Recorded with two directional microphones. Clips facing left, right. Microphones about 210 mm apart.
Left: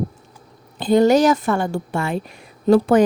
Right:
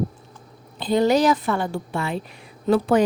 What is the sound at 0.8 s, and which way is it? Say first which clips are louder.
A woman's voice: left 4 dB; 50° left (ahead or behind).